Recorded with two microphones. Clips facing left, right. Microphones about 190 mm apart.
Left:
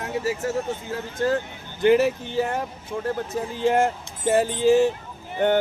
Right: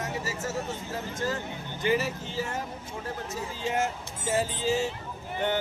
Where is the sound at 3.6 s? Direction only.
55° left (ahead or behind).